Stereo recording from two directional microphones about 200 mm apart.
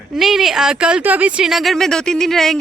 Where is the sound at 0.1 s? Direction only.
Centre (ahead or behind).